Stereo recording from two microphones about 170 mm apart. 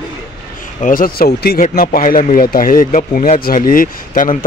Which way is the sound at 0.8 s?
55° left (ahead or behind).